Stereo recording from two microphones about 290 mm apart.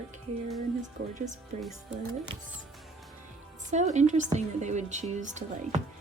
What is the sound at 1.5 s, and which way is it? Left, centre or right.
Speech, right.